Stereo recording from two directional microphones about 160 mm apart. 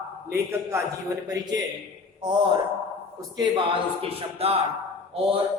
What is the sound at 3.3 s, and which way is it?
Speech, 25° right (ahead or behind).